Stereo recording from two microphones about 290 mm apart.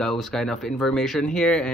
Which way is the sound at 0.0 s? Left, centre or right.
Centre.